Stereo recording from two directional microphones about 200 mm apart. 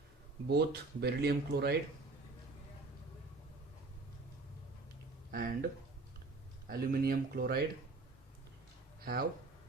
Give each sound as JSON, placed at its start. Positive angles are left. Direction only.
{"t": 0.4, "sound": "speech", "side_deg": -55}
{"t": 5.3, "sound": "speech", "side_deg": -45}
{"t": 6.7, "sound": "speech", "side_deg": -45}
{"t": 9.1, "sound": "speech", "side_deg": -50}